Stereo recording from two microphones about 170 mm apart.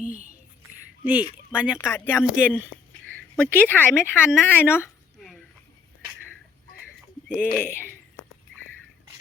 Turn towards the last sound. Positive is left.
turn(degrees=65)  # may be behind; listen again after turning